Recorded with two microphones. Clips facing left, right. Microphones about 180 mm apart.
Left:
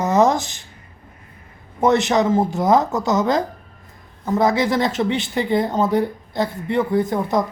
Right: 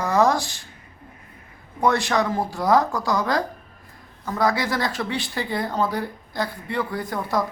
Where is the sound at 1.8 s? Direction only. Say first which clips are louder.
Left 5 dB; 20° left (ahead or behind).